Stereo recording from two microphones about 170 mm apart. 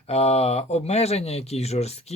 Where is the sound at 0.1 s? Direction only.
35° left (ahead or behind).